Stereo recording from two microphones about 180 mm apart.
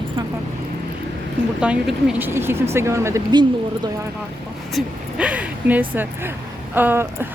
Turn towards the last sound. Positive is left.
turn(degrees=-10)  # may be behind; listen again after turning